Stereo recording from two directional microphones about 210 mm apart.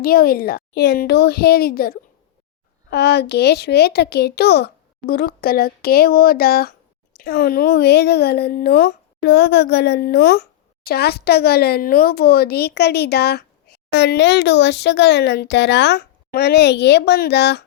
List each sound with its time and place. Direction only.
0.0 s a child's voice: 45° left (ahead or behind)